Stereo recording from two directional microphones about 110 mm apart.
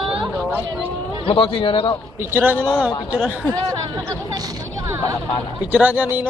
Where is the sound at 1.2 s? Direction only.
55° left (ahead or behind).